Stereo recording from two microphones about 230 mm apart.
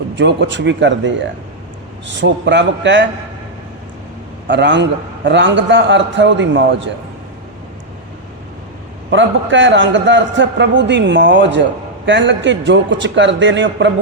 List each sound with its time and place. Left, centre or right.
0.2 s a man's voice: right
4.4 s a man's voice: right
9.0 s a man's voice: right